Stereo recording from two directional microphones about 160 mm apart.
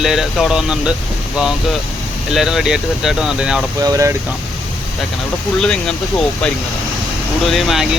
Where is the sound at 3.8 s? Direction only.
20° right (ahead or behind).